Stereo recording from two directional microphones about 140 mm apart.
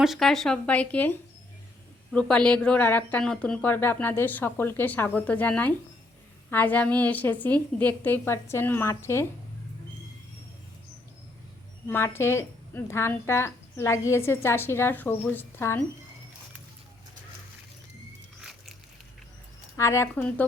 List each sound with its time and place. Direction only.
0.0 s speech: centre (ahead or behind)
2.1 s speech: 5° left (ahead or behind)
11.9 s speech: 15° left (ahead or behind)
19.7 s speech: 20° left (ahead or behind)